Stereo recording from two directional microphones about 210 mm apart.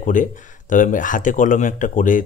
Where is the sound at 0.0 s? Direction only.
40° left (ahead or behind).